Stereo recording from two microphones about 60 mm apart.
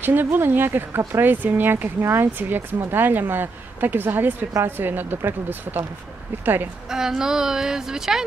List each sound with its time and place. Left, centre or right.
0.0 s speech: right
6.9 s speech: centre